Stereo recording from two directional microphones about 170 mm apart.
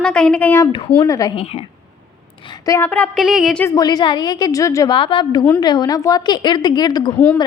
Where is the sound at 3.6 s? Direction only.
20° left (ahead or behind).